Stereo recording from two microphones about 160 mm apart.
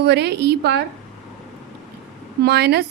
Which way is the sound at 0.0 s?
90° right.